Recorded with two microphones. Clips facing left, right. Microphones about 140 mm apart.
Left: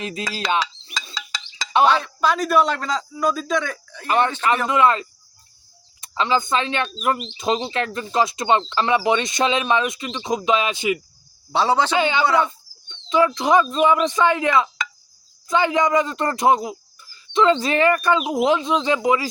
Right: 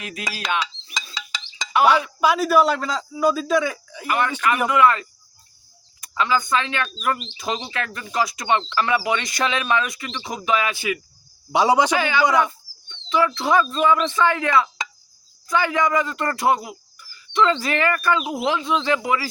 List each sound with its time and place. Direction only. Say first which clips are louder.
0.0 s speech: left 5 dB; 25° left (ahead or behind)
0.3 s music: left 3 dB; 25° left (ahead or behind)
1.8 s a man's voice: right 1 dB; 10° right (ahead or behind)
4.0 s speech: left 2 dB; 30° left (ahead or behind)
11.5 s a man's voice: right 2 dB; 15° right (ahead or behind)
11.9 s speech: left 2 dB; 20° left (ahead or behind)
12.2 s a man's voice: right 2 dB; 15° right (ahead or behind)
12.5 s speech: right 1 dB; 20° left (ahead or behind)